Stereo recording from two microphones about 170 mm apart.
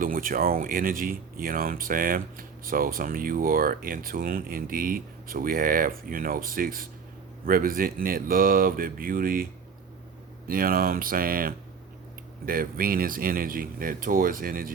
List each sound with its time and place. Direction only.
0.0 s speech: 55° right (ahead or behind)